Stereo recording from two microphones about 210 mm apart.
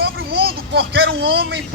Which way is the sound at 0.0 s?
50° right (ahead or behind).